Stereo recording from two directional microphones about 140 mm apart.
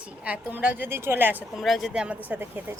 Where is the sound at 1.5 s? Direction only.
Centre (ahead or behind).